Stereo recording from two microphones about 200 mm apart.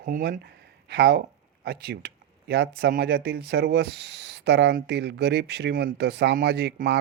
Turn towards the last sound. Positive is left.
turn(degrees=-60)  # may be behind; listen again after turning